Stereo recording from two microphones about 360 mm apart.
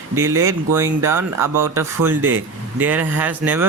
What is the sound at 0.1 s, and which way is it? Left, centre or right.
Speech, centre.